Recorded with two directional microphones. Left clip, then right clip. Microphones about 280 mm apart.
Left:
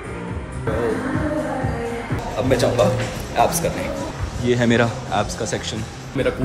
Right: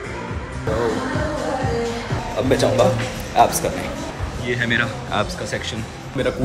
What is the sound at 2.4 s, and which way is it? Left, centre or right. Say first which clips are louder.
A man's voice: right 1 dB; centre.